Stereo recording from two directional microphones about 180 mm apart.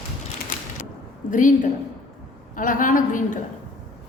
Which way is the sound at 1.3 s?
45° left (ahead or behind).